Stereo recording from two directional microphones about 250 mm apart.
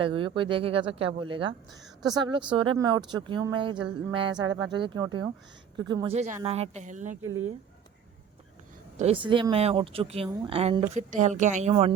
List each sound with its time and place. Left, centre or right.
0.0 s speech: centre
9.0 s speech: right